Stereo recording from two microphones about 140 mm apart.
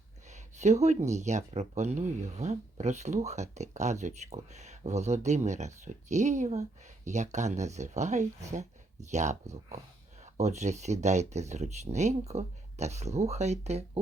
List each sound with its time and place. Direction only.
0.6 s speech: 55° right (ahead or behind)